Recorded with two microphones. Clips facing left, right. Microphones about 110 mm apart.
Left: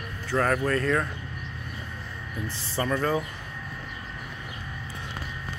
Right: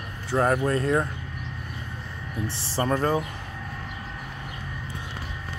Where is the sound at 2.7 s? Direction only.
35° right (ahead or behind).